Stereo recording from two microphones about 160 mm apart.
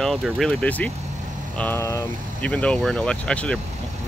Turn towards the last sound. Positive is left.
turn(degrees=5)  # may be behind; listen again after turning